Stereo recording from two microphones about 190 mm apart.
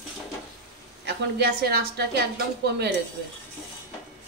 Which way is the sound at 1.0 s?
55° right (ahead or behind).